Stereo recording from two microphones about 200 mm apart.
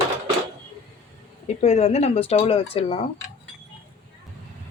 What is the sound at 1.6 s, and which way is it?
Speech, 35° left (ahead or behind).